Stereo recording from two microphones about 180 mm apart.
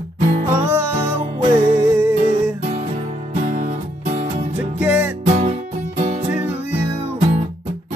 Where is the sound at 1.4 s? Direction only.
25° right (ahead or behind).